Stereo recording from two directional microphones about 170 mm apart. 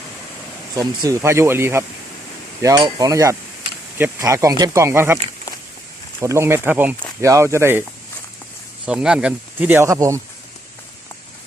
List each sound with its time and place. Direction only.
0.8 s speech: 15° right (ahead or behind)
2.6 s a sound: 20° right (ahead or behind)
3.9 s speech: 15° right (ahead or behind)
8.9 s speech: 5° right (ahead or behind)